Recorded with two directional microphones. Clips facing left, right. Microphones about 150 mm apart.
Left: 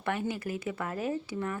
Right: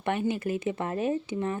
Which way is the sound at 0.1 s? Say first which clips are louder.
Right 5 dB; 20° right (ahead or behind).